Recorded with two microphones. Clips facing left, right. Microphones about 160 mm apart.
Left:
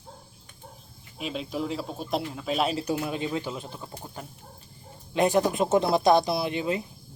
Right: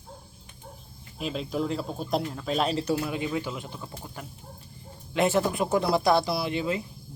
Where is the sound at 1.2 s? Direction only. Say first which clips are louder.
Right 2 dB; centre (ahead or behind).